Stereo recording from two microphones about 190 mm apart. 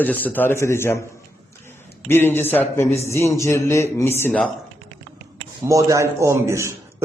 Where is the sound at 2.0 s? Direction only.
10° left (ahead or behind).